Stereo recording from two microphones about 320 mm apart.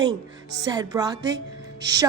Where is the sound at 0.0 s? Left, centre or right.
Centre.